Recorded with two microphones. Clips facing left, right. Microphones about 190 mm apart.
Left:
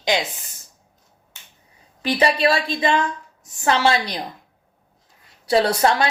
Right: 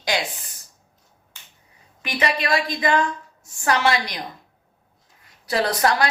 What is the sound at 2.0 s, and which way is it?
A woman's voice, 30° left (ahead or behind).